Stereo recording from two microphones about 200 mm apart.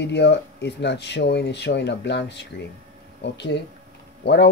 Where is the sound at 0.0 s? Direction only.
60° left (ahead or behind).